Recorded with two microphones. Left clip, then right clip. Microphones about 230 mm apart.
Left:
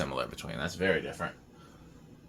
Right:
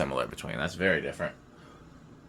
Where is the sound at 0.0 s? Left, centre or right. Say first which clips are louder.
Right 4 dB; right.